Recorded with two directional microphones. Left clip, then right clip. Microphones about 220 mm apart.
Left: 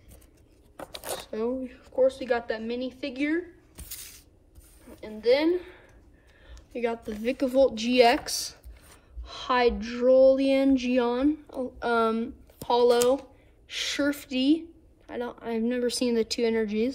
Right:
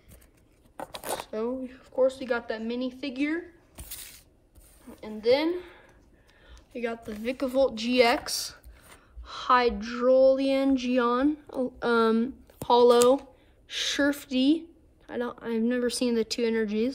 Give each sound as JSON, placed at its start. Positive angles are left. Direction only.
{"t": 1.2, "sound": "speech", "side_deg": -10}
{"t": 3.7, "sound": "a sound", "side_deg": -30}
{"t": 4.8, "sound": "a woman's voice", "side_deg": -15}